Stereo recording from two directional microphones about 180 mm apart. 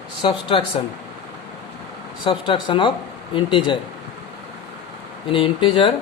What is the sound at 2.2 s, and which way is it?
Speech, 25° left (ahead or behind).